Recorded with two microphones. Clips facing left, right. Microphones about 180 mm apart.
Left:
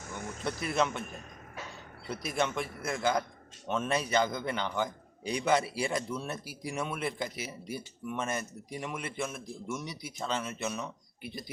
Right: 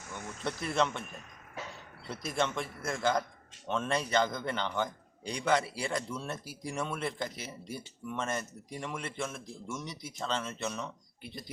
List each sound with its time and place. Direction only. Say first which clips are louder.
0.4 s a man's voice: even; 5° left (ahead or behind)
2.0 s a man's voice: left 1 dB; 5° left (ahead or behind)